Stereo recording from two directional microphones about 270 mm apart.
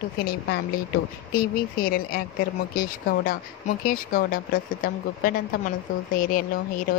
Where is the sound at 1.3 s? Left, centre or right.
Left.